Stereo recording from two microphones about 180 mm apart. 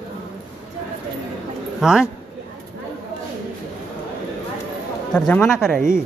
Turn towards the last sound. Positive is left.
turn(degrees=0)  # may be behind; listen again after turning